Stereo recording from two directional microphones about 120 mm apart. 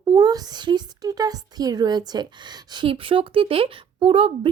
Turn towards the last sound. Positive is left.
turn(degrees=-50)  # may be behind; listen again after turning